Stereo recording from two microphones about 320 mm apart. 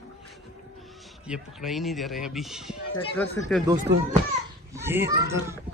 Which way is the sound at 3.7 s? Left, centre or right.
Right.